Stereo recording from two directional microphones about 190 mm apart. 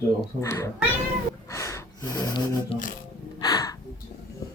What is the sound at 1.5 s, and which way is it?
Gasp, 15° left (ahead or behind).